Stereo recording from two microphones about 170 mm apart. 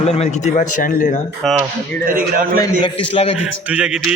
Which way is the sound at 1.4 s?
Centre (ahead or behind).